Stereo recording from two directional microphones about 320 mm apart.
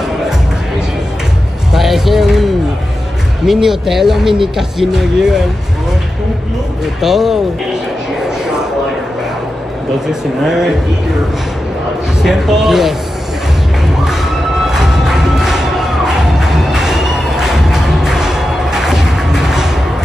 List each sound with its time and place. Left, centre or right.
1.7 s a sound: centre
3.4 s speech: centre
7.0 s speech: centre
10.4 s speech: centre
12.2 s speech: centre
14.0 s music: centre